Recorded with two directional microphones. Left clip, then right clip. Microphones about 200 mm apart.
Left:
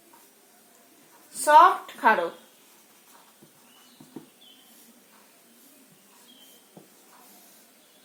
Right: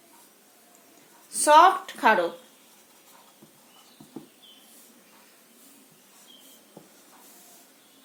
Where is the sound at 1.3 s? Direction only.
40° right (ahead or behind).